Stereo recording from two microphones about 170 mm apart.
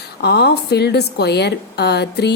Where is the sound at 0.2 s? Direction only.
80° left.